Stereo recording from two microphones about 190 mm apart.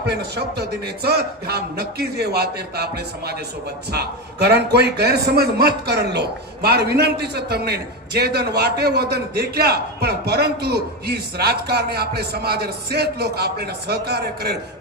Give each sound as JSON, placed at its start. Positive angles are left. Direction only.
{"t": 0.1, "sound": "a man's voice", "side_deg": -60}